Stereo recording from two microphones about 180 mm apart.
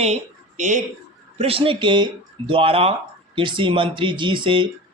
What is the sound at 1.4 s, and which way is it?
A man's voice, 30° right (ahead or behind).